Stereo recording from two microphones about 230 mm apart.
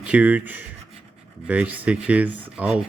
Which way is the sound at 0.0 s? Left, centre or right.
Centre.